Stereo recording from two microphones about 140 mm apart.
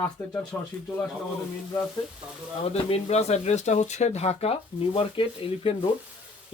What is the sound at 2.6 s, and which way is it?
Speech, 45° left (ahead or behind).